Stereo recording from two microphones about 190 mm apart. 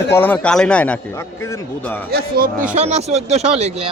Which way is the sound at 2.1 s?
55° right (ahead or behind).